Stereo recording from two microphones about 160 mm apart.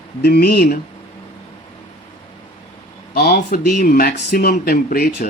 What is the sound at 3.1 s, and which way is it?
Speech, 80° left.